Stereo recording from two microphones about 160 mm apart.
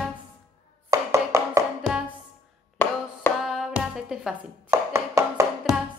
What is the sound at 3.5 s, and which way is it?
Music, centre (ahead or behind).